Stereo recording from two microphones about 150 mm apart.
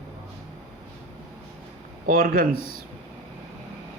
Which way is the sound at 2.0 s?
70° right (ahead or behind).